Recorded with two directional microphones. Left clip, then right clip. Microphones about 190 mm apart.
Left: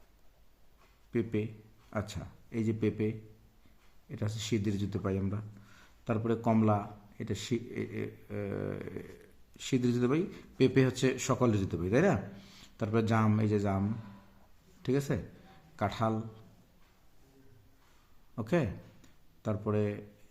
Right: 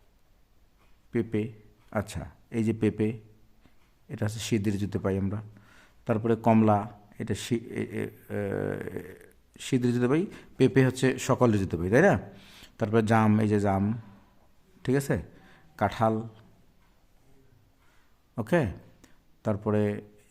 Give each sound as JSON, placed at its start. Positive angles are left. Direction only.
{"t": 1.1, "sound": "a man's voice", "side_deg": -35}
{"t": 18.3, "sound": "speech", "side_deg": -40}